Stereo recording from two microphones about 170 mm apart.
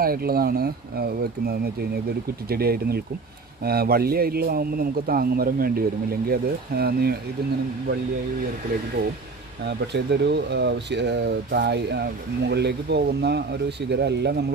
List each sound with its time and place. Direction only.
0.0 s a man's voice: 60° right (ahead or behind)
9.7 s speech: 80° right